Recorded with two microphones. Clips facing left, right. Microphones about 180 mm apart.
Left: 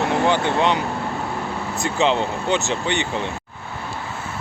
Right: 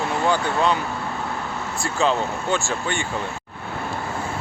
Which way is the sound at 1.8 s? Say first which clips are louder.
Left 2 dB; 20° left (ahead or behind).